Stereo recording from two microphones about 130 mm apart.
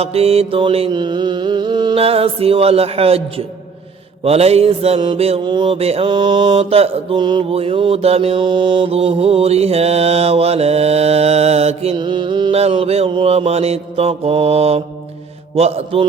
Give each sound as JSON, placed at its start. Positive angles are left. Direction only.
{"t": 0.0, "sound": "mantra", "side_deg": -50}
{"t": 2.0, "sound": "mantra", "side_deg": -50}
{"t": 5.4, "sound": "mantra", "side_deg": -35}
{"t": 6.1, "sound": "mantra", "side_deg": -35}
{"t": 6.6, "sound": "mantra", "side_deg": -50}
{"t": 7.2, "sound": "mantra", "side_deg": -35}
{"t": 7.5, "sound": "mantra", "side_deg": -45}
{"t": 11.9, "sound": "mantra", "side_deg": -35}
{"t": 12.5, "sound": "mantra", "side_deg": -50}